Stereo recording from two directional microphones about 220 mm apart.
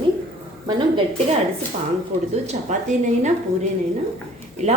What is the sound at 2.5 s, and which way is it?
Speech, 30° right (ahead or behind).